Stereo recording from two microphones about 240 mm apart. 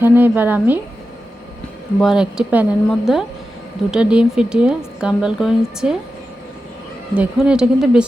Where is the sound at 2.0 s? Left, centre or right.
Centre.